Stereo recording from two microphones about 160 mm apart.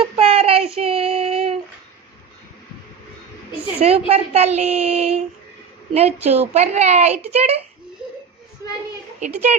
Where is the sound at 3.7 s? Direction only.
40° right (ahead or behind).